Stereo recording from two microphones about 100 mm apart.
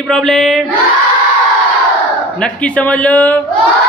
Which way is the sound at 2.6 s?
15° left (ahead or behind).